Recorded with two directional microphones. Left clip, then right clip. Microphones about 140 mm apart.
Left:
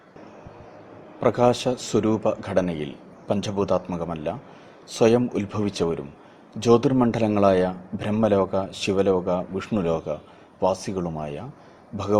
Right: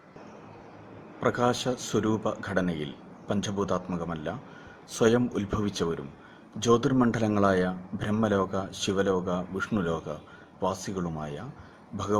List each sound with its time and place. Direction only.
1.2 s a man's voice: 20° left (ahead or behind)